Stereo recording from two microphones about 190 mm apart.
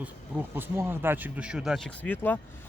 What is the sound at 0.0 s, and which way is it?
Speech, 10° right (ahead or behind).